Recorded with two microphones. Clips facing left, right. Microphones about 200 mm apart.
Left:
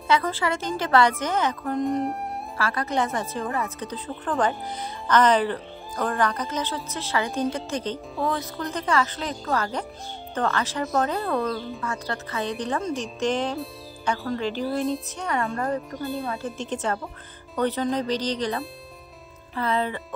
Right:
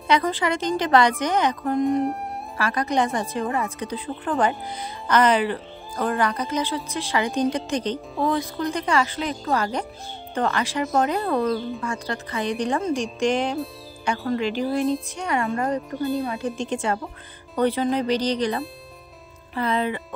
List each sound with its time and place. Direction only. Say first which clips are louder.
0.1 s speech: right 2 dB; 15° right (ahead or behind)
1.9 s speech: right 3 dB; centre (ahead or behind)
2.5 s speech: right 3 dB; 15° right (ahead or behind)